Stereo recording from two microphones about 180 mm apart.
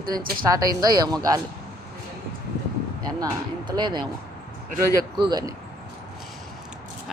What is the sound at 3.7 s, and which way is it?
Speech, 25° right (ahead or behind).